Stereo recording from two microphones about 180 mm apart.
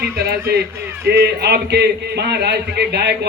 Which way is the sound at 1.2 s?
65° right (ahead or behind).